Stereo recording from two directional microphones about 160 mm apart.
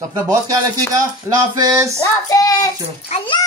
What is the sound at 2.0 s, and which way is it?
Child singing, 20° left (ahead or behind).